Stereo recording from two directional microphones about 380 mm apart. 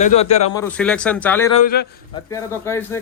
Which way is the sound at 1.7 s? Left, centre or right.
Left.